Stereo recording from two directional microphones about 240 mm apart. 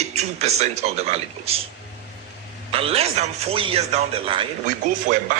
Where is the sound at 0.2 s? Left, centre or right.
Right.